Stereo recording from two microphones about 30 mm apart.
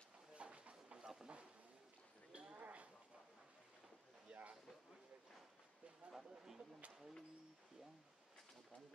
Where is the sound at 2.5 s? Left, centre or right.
Right.